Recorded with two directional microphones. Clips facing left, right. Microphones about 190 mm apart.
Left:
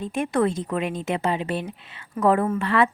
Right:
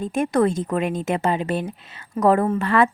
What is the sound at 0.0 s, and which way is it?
A woman's voice, 45° right (ahead or behind).